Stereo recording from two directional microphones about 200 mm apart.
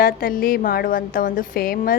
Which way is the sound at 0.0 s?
45° left (ahead or behind).